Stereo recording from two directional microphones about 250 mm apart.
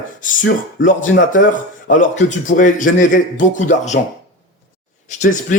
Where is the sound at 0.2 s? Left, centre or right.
Left.